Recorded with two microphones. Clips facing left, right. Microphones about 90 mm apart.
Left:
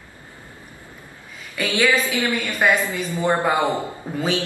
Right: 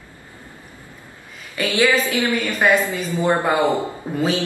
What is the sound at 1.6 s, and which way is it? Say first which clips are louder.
A woman's voice: right 2 dB; 15° right (ahead or behind).